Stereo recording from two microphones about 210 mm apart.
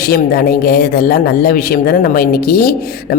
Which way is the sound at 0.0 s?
45° left (ahead or behind).